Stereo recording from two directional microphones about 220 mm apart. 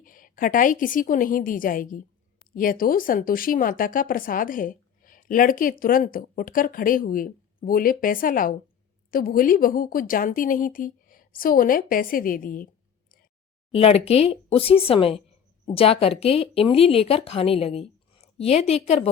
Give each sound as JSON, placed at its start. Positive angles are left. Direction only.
{"t": 0.0, "sound": "speech", "side_deg": 40}
{"t": 13.7, "sound": "speech", "side_deg": 25}